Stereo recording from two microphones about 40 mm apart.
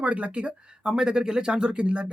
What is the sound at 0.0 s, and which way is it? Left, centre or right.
Speech, right.